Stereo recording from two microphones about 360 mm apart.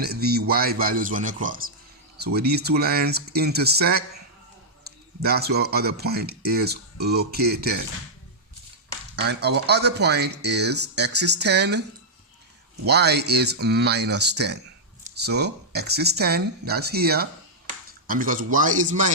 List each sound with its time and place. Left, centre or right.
0.0 s speech: right
9.1 s speech: right